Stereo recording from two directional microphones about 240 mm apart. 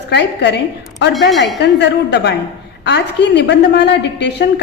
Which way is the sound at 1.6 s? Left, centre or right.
Left.